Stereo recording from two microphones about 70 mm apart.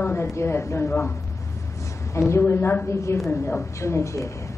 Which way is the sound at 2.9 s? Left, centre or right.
Left.